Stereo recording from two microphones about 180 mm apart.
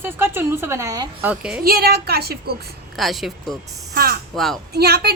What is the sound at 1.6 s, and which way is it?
Speech, 60° right (ahead or behind).